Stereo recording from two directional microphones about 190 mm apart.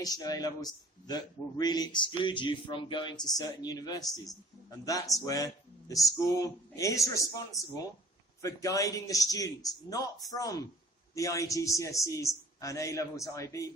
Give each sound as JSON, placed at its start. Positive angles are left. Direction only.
{"t": 0.0, "sound": "a man's voice", "side_deg": 20}